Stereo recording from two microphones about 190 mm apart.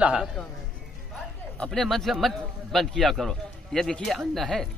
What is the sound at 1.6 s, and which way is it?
A man's voice, centre (ahead or behind).